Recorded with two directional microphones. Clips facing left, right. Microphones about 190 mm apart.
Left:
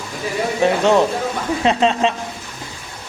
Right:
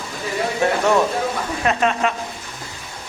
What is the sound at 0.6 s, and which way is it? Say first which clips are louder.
A man's voice: left 3 dB; 20° left (ahead or behind).